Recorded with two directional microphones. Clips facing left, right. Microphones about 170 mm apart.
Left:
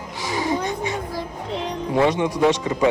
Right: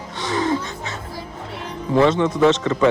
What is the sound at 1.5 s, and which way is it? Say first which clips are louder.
Music: right 1 dB; 20° left (ahead or behind).